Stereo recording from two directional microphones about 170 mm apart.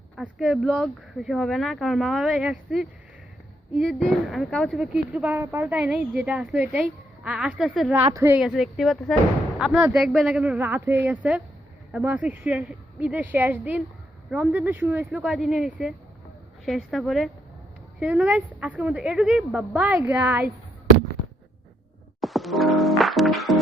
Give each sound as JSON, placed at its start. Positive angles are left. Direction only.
{"t": 0.2, "sound": "a woman's voice", "side_deg": -5}
{"t": 8.1, "sound": "a woman's voice", "side_deg": -15}
{"t": 8.4, "sound": "a woman's voice", "side_deg": -5}
{"t": 22.2, "sound": "music", "side_deg": 0}